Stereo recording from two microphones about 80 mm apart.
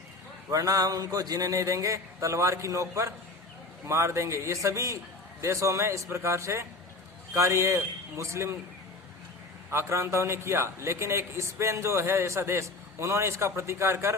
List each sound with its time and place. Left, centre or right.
0.5 s a man's voice: right
9.6 s a man's voice: right